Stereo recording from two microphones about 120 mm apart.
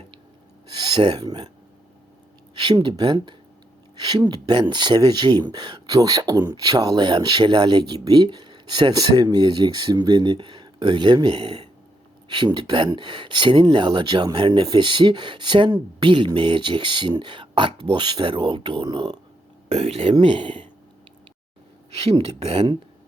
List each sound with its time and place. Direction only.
0.7 s speech: 35° right (ahead or behind)
2.6 s speech: 40° right (ahead or behind)
19.6 s speech: 55° right (ahead or behind)
22.2 s speech: 60° right (ahead or behind)